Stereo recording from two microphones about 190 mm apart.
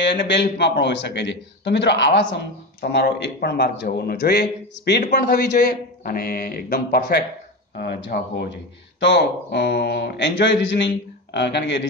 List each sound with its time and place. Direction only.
0.0 s a man's voice: 65° left (ahead or behind)